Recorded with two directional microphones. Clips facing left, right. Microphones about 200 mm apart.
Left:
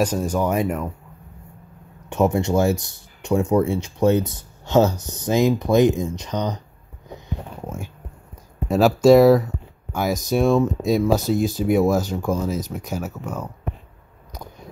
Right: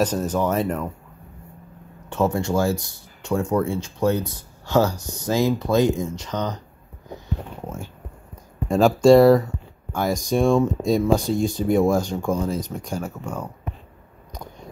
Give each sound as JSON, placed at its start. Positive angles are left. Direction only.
{"t": 0.0, "sound": "speech", "side_deg": 10}
{"t": 2.0, "sound": "speech", "side_deg": 15}
{"t": 7.6, "sound": "speech", "side_deg": 10}